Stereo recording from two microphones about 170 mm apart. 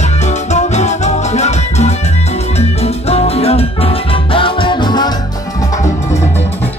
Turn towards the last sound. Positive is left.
turn(degrees=25)  # may be behind; listen again after turning